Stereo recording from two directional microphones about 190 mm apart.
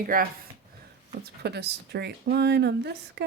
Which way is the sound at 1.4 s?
60° right (ahead or behind).